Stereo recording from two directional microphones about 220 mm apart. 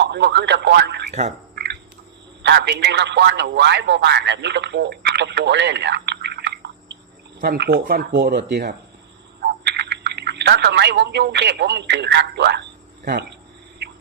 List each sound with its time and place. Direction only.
0.0 s speech: 50° right (ahead or behind)
1.5 s a sound: 50° right (ahead or behind)
2.4 s a man's voice: 50° right (ahead or behind)